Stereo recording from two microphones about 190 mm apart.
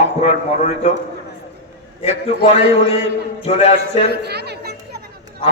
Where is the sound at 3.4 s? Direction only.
35° left (ahead or behind).